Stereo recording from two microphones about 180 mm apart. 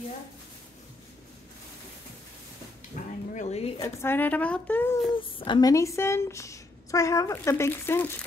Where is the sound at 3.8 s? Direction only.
15° left (ahead or behind).